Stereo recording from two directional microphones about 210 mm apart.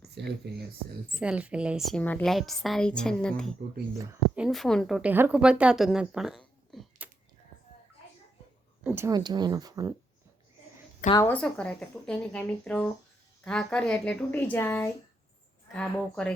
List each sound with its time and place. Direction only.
0.1 s speech: 50° right (ahead or behind)
1.1 s a woman's voice: 5° right (ahead or behind)
3.9 s speech: 15° right (ahead or behind)
4.4 s a woman's voice: centre (ahead or behind)
6.7 s a sound: centre (ahead or behind)
8.8 s speech: 10° right (ahead or behind)
11.1 s a woman's voice: 10° left (ahead or behind)